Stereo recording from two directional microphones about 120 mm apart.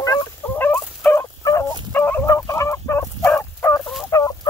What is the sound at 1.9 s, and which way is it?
Fowl, 15° left (ahead or behind).